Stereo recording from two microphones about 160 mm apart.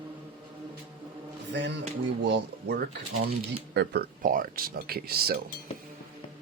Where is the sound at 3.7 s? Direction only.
75° right (ahead or behind).